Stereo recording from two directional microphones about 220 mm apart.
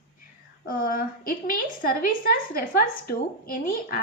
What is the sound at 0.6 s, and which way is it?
A woman's voice, 40° left (ahead or behind).